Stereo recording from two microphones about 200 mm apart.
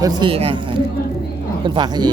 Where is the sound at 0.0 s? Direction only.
25° right (ahead or behind).